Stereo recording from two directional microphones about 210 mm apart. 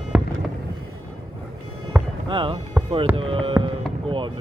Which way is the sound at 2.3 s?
20° right (ahead or behind).